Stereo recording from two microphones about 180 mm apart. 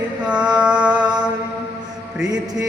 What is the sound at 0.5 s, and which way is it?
Music, 5° right (ahead or behind).